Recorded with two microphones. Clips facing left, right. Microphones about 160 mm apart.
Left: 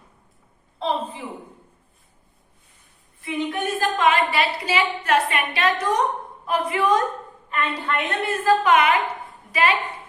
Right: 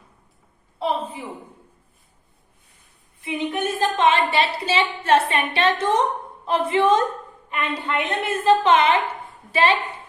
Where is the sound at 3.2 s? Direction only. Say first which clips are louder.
Right 1 dB; 20° right (ahead or behind).